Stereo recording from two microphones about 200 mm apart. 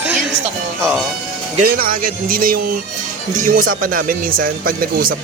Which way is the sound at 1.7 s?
45° right (ahead or behind).